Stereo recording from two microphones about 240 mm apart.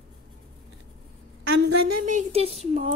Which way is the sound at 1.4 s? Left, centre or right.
Right.